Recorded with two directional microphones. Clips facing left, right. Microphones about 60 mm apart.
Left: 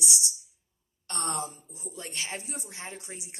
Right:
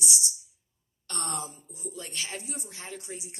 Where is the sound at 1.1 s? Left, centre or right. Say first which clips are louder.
Left 2 dB; left.